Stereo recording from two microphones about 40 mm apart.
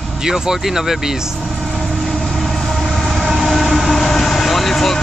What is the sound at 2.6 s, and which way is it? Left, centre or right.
Train, centre.